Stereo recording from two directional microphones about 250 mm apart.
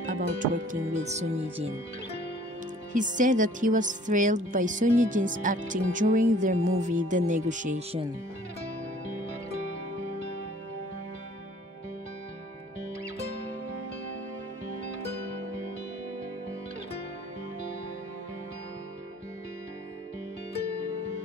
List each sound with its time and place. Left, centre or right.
0.0 s speech: right
2.9 s speech: right